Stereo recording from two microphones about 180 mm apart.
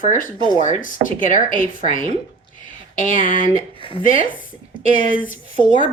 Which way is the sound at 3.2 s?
50° left (ahead or behind).